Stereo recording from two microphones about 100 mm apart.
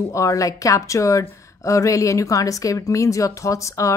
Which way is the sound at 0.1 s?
35° left (ahead or behind).